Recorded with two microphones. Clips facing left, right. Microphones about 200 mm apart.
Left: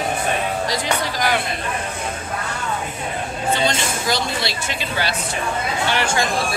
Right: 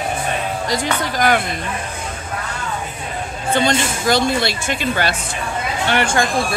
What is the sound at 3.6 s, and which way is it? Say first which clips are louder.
Speech: right 4 dB; 50° right (ahead or behind).